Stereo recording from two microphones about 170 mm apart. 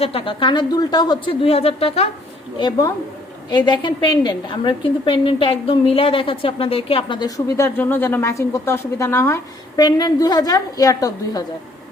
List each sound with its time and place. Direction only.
0.0 s a woman's voice: 35° left (ahead or behind)